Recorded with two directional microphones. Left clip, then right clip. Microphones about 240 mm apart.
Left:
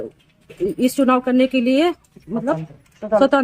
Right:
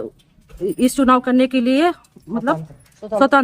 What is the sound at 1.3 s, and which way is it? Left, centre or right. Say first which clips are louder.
Speech: even; centre.